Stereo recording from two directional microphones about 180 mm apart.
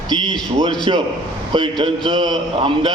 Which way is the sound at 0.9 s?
30° right (ahead or behind).